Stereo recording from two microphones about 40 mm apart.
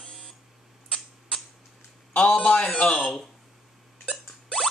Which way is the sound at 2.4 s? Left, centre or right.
Left.